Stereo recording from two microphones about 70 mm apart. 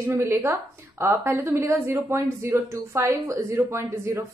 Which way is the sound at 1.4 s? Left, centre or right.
Right.